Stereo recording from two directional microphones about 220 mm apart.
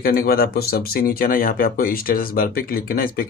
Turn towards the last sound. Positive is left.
turn(degrees=40)  # may be behind; listen again after turning